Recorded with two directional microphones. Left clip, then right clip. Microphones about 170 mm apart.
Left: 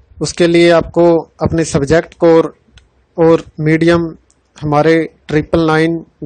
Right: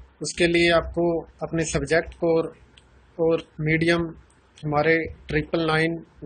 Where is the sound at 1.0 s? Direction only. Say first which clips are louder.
Left 14 dB; 60° left (ahead or behind).